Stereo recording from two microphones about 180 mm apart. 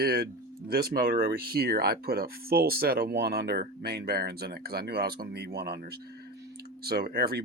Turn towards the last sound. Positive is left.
turn(degrees=-55)  # may be behind; listen again after turning